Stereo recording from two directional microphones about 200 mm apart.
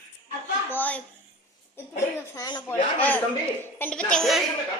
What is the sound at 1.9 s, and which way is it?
Speech, 20° left (ahead or behind).